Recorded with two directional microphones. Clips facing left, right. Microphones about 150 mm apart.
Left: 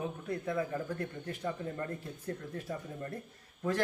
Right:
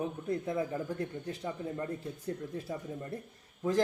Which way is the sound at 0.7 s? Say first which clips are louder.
Right 1 dB; 20° right (ahead or behind).